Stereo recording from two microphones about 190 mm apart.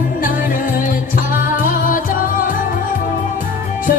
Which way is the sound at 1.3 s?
50° left (ahead or behind).